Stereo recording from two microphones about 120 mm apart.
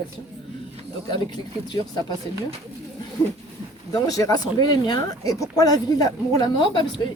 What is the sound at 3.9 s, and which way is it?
Speech, 35° left (ahead or behind).